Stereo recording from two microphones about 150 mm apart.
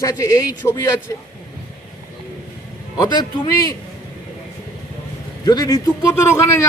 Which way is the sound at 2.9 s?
25° left (ahead or behind).